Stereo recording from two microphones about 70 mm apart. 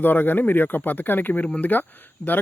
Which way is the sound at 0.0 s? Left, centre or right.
Left.